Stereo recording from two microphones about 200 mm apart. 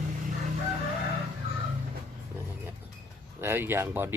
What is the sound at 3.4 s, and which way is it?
Speech, 10° right (ahead or behind).